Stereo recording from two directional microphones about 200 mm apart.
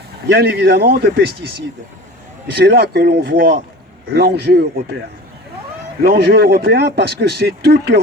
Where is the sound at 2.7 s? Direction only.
55° right (ahead or behind).